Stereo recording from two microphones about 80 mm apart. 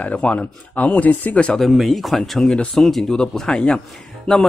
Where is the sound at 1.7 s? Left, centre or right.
Centre.